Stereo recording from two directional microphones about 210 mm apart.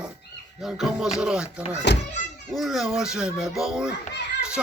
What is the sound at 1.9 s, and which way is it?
Speech, 55° left (ahead or behind).